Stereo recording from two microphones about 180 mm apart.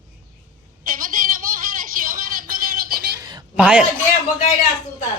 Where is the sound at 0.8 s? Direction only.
50° right (ahead or behind).